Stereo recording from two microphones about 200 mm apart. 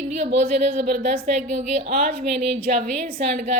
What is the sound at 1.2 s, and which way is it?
A woman's voice, 35° right (ahead or behind).